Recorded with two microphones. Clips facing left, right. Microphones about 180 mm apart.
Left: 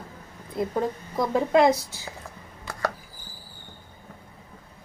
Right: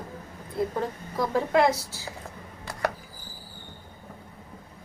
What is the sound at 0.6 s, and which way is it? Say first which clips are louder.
A woman's voice: left 2 dB; 15° left (ahead or behind).